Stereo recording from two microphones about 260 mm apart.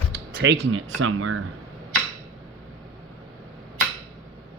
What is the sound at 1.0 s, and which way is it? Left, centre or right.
Speech, right.